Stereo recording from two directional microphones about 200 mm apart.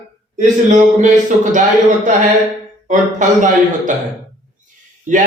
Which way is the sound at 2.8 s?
40° right (ahead or behind).